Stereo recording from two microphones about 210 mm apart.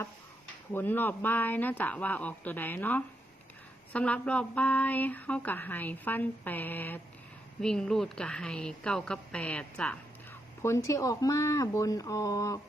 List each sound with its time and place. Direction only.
0.7 s a woman's voice: 10° left (ahead or behind)